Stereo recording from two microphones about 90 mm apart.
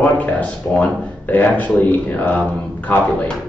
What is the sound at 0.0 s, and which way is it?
Speech, 15° left (ahead or behind).